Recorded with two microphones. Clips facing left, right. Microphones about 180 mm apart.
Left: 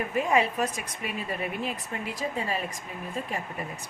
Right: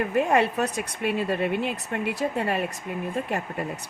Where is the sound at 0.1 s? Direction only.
65° right (ahead or behind).